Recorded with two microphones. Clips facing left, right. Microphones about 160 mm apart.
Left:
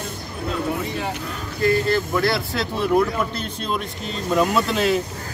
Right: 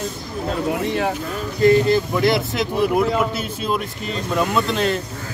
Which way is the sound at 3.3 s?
5° right (ahead or behind).